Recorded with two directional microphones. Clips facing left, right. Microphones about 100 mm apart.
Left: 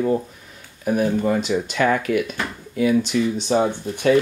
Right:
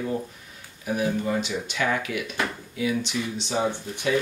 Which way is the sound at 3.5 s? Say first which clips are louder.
Left 7 dB; 55° left (ahead or behind).